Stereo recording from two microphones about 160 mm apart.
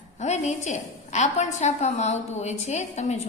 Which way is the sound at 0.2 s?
45° left (ahead or behind).